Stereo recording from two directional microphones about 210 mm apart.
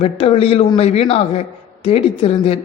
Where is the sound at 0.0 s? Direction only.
30° left (ahead or behind).